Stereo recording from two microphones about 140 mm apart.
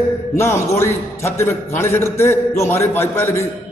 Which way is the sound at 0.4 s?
20° left (ahead or behind).